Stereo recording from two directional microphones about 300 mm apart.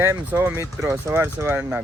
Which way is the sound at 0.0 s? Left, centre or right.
Centre.